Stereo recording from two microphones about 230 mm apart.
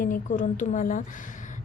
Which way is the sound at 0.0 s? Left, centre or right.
Left.